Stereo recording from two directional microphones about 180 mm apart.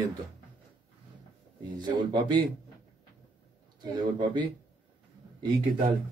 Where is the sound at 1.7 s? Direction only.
20° right (ahead or behind).